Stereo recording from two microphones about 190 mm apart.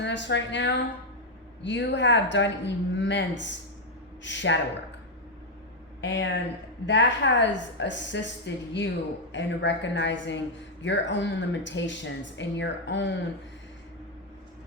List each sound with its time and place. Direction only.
0.0 s a woman's voice: 70° left (ahead or behind)
6.0 s speech: 70° left (ahead or behind)